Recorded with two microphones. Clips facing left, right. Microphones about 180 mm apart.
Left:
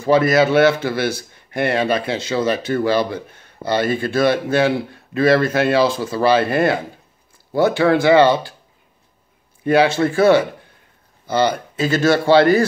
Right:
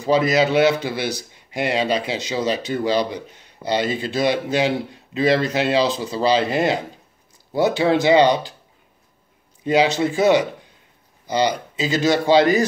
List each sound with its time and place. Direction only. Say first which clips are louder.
0.0 s a man's voice: left 3 dB; 15° right (ahead or behind)
9.7 s a man's voice: left 3 dB; 20° right (ahead or behind)